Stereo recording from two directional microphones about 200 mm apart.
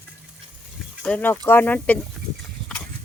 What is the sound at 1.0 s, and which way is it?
Speech, 5° left (ahead or behind).